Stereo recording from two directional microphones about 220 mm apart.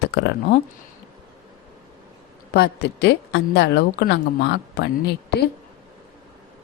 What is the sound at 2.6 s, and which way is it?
A woman's voice, 50° left (ahead or behind).